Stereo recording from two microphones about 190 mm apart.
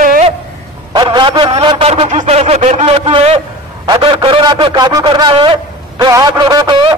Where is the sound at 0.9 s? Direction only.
25° right (ahead or behind).